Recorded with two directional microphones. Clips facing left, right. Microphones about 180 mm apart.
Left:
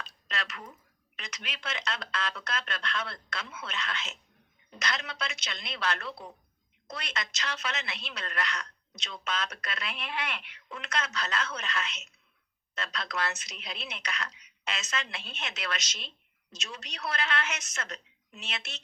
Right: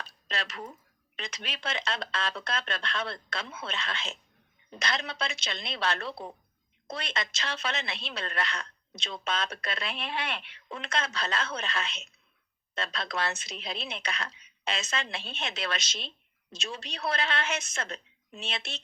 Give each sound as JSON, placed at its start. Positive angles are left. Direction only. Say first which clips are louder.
{"t": 0.3, "sound": "speech", "louder": "right 2 dB", "side_deg": -30}